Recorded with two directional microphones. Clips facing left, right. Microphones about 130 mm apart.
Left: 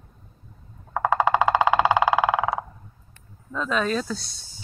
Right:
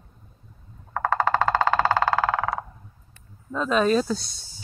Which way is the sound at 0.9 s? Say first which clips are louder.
Left 2 dB; 10° left (ahead or behind).